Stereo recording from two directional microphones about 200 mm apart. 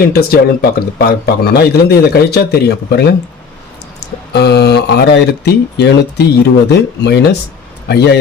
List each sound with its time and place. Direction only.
0.0 s a man's voice: 50° left (ahead or behind)
4.3 s speech: 55° left (ahead or behind)